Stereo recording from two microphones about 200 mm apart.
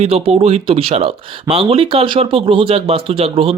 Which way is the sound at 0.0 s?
30° right (ahead or behind).